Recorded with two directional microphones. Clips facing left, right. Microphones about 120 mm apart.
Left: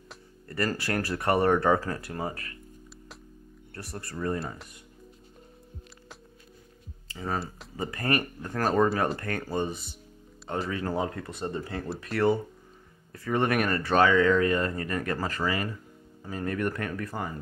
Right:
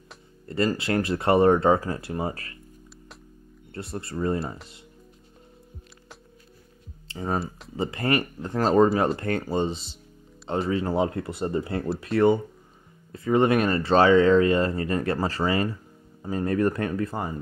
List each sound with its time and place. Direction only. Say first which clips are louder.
0.5 s speech: right 5 dB; 20° right (ahead or behind)
3.7 s speech: right 6 dB; 25° right (ahead or behind)
7.1 s speech: right 4 dB; 30° right (ahead or behind)
12.0 s speech: right 4 dB; 25° right (ahead or behind)